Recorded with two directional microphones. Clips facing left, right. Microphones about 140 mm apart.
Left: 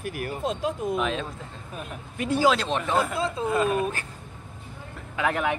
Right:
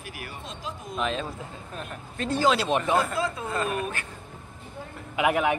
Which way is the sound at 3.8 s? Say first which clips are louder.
Left 4 dB; 35° left (ahead or behind).